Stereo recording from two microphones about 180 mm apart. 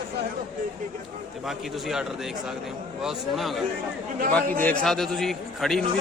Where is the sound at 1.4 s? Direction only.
Centre (ahead or behind).